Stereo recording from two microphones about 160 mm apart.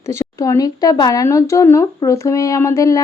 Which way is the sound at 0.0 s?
15° left (ahead or behind).